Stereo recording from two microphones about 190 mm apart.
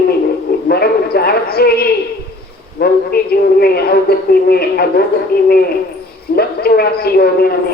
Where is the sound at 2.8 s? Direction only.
55° left (ahead or behind).